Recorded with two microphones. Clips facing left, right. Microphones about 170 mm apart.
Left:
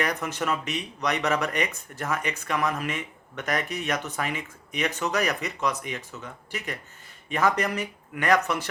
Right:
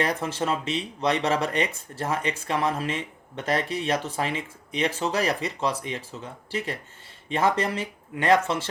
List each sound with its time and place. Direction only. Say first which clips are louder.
0.0 s speech: right 2 dB; 30° right (ahead or behind)